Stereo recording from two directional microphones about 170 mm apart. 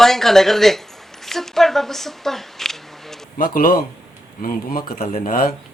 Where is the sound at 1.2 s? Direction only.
Centre (ahead or behind).